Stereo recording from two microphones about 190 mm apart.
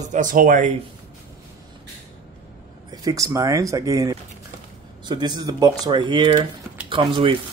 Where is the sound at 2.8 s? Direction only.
20° right (ahead or behind).